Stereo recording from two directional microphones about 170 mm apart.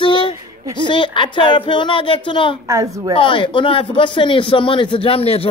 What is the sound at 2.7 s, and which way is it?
Speech, 20° right (ahead or behind).